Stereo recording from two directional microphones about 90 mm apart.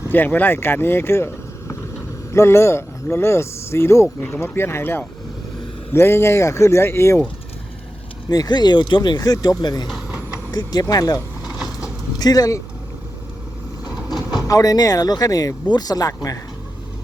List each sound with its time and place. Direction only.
0.1 s speech: 20° left (ahead or behind)
8.3 s speech: 50° left (ahead or behind)
11.8 s a sound: 45° left (ahead or behind)
14.4 s speech: 40° left (ahead or behind)